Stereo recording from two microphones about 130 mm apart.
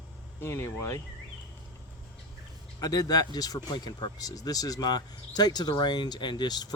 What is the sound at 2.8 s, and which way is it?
Speech, 30° left (ahead or behind).